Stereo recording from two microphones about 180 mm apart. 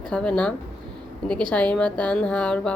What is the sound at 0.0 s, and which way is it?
Speech, 5° left (ahead or behind).